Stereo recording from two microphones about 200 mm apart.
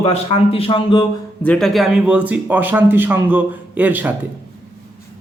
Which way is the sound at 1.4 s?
5° left (ahead or behind).